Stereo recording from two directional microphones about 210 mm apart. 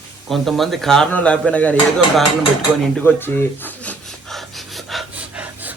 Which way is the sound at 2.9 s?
10° left (ahead or behind).